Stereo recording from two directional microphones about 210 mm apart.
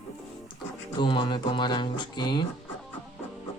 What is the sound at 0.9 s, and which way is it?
Speech, 20° left (ahead or behind).